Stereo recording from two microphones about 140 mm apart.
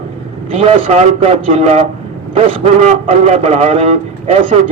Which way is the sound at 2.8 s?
55° right (ahead or behind).